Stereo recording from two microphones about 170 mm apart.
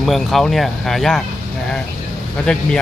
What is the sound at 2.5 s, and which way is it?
Speech, 5° left (ahead or behind).